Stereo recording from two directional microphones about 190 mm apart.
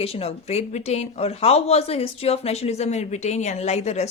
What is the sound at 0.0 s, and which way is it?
Speech, 30° left (ahead or behind).